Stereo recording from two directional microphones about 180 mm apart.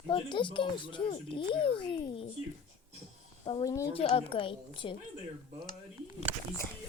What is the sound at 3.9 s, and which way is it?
Speech, 30° left (ahead or behind).